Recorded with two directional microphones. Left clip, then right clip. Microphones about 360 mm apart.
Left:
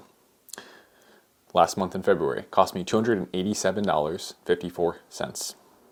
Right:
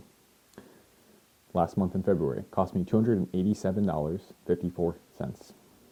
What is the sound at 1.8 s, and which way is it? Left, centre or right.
Speech, centre.